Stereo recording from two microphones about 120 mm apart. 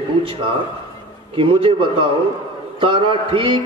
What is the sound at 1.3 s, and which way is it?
A man's voice, 45° right (ahead or behind).